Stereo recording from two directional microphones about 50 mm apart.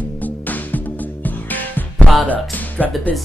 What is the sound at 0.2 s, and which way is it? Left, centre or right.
Music, left.